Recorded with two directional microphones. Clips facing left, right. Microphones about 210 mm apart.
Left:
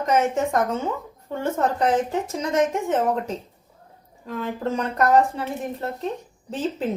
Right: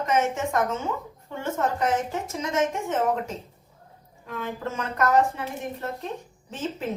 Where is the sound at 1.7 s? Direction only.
35° left (ahead or behind).